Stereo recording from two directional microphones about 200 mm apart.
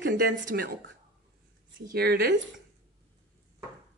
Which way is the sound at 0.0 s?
45° right (ahead or behind).